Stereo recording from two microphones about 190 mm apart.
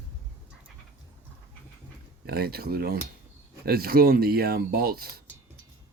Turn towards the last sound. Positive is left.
turn(degrees=-50)  # may be behind; listen again after turning